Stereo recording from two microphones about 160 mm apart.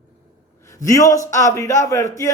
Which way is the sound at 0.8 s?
20° left (ahead or behind).